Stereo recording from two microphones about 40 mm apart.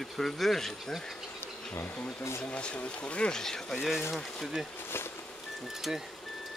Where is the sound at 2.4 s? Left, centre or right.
Left.